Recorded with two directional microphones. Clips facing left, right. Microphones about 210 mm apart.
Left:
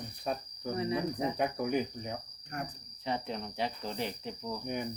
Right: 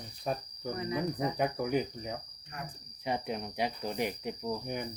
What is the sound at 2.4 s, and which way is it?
Cricket, 50° left (ahead or behind).